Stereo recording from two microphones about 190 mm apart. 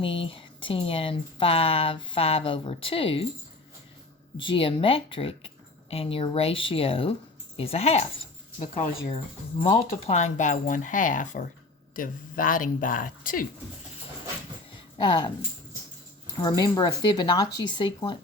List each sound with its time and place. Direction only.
0.0 s speech: 30° left (ahead or behind)
4.4 s speech: 30° left (ahead or behind); by 13.5 s 45° left (ahead or behind)
14.9 s speech: 20° left (ahead or behind)
16.4 s speech: 20° left (ahead or behind)